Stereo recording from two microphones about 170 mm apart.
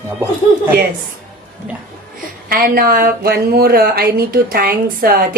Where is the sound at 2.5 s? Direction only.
60° right (ahead or behind).